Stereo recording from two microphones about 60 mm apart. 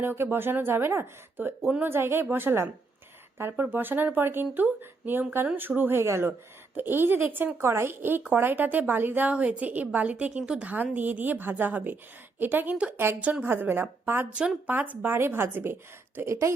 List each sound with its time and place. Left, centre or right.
0.0 s speech: right
6.0 s speech: right
7.6 s speech: right
9.3 s a woman's voice: right
14.7 s a woman's voice: right
15.1 s speech: right